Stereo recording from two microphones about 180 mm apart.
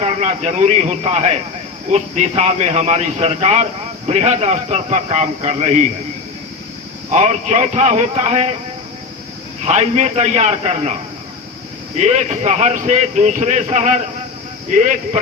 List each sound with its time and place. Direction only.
0.0 s a man's voice: 40° right (ahead or behind)
7.1 s a man's voice: 40° right (ahead or behind)
9.6 s a man's voice: 40° right (ahead or behind)
11.9 s a man's voice: 40° right (ahead or behind)